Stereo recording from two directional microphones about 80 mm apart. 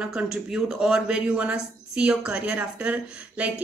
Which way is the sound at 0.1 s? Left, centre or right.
Centre.